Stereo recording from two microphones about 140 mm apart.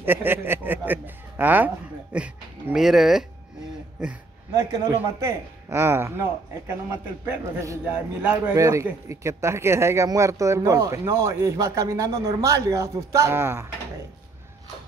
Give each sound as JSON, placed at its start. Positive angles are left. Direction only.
{"t": 0.0, "sound": "speech", "side_deg": -15}
{"t": 4.6, "sound": "a man's voice", "side_deg": -20}
{"t": 7.2, "sound": "speech", "side_deg": -20}
{"t": 8.2, "sound": "a man's voice", "side_deg": -10}
{"t": 8.5, "sound": "speech", "side_deg": -20}